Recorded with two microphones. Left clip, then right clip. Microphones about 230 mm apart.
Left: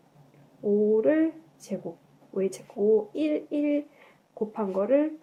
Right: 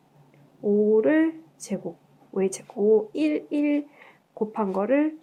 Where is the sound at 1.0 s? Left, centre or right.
Right.